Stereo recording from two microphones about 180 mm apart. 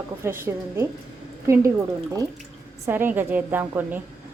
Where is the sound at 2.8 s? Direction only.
10° right (ahead or behind).